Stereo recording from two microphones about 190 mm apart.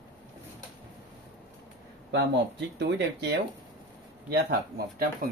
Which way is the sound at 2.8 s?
65° right (ahead or behind).